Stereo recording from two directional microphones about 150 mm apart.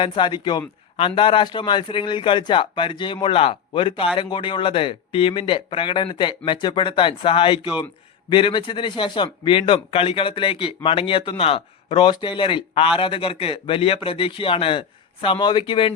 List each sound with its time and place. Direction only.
0.0 s speech: 35° left (ahead or behind)